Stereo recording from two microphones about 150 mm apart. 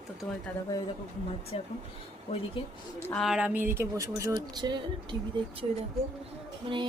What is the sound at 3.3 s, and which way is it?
Speech, 10° right (ahead or behind).